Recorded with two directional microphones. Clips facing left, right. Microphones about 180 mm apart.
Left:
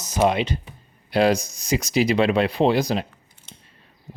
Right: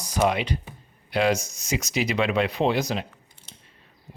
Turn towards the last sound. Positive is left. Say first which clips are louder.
# left 4 dB
turn(degrees=35)  # may be behind; listen again after turning